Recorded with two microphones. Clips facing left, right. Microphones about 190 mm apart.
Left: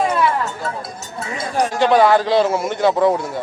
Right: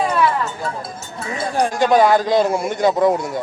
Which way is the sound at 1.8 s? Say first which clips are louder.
Left 1 dB; 15° right (ahead or behind).